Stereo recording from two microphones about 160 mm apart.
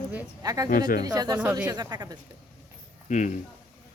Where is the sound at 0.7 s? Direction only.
60° left (ahead or behind).